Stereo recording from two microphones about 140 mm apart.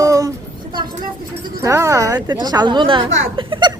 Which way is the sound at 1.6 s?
20° right (ahead or behind).